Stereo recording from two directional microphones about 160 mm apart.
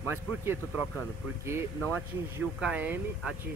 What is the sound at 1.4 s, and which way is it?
Speech, 15° right (ahead or behind).